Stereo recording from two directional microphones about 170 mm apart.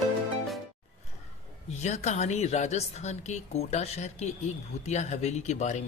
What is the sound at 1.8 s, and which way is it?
A woman's voice, 40° left (ahead or behind).